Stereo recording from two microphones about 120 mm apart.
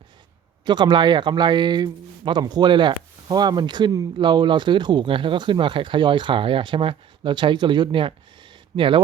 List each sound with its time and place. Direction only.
0.6 s speech: 40° right (ahead or behind)